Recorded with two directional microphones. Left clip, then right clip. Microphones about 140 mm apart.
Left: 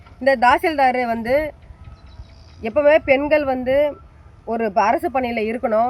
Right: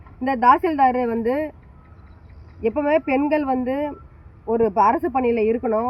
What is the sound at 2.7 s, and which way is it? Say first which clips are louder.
Speech: left 7 dB; 30° left (ahead or behind).